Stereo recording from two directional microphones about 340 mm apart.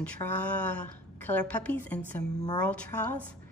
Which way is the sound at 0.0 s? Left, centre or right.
Centre.